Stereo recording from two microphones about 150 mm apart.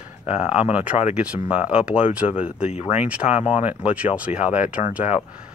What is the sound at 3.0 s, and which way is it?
Speech, 10° right (ahead or behind).